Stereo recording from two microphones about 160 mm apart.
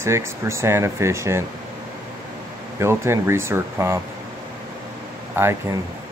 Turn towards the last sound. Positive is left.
turn(degrees=-15)  # may be behind; listen again after turning